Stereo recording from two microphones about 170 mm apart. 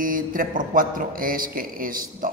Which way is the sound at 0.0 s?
55° right (ahead or behind).